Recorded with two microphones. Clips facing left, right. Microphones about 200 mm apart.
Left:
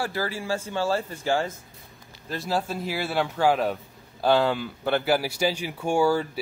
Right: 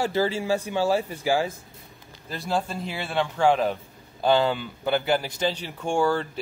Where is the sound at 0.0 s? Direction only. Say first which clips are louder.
Right 5 dB; 25° right (ahead or behind).